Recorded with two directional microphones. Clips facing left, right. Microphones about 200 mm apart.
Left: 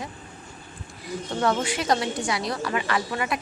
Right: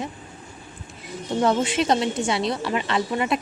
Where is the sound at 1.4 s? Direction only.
20° right (ahead or behind).